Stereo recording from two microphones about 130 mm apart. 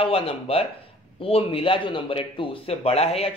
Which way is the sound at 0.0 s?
45° left (ahead or behind).